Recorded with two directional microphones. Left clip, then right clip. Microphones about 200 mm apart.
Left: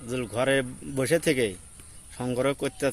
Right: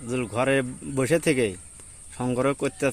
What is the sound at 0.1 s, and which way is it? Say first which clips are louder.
Speech: right 1 dB; 40° right (ahead or behind).